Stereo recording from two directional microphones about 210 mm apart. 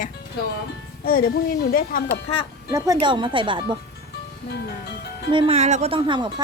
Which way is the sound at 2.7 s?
15° right (ahead or behind).